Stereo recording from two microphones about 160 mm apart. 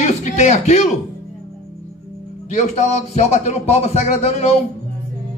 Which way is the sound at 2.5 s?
45° left (ahead or behind).